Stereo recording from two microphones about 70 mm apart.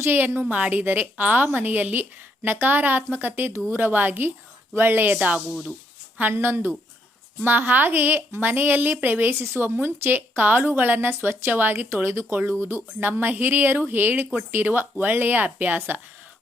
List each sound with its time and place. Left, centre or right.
0.0 s a woman's voice: right